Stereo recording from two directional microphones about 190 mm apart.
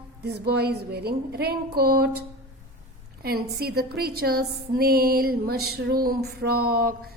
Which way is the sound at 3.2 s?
55° right (ahead or behind).